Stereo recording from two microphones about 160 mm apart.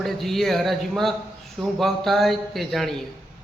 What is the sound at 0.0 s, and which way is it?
A man's voice, centre (ahead or behind).